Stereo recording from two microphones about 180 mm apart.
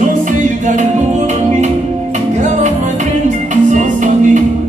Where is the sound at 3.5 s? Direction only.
45° right (ahead or behind).